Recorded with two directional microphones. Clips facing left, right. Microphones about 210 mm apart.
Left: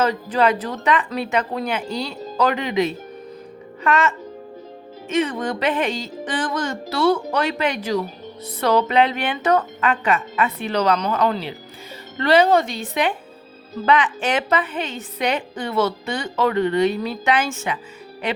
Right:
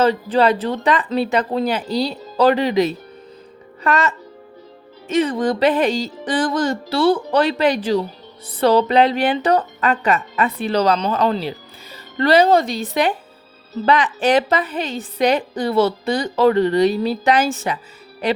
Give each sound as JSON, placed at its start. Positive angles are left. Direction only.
{"t": 0.0, "sound": "a woman's voice", "side_deg": -30}